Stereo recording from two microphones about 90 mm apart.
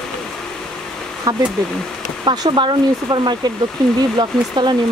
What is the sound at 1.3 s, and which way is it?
Speech, 45° right (ahead or behind).